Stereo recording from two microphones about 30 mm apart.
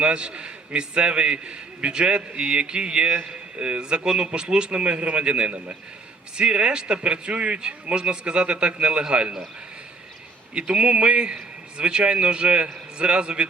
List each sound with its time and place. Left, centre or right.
0.0 s a man's voice: right
6.3 s a man's voice: right
10.5 s a man's voice: right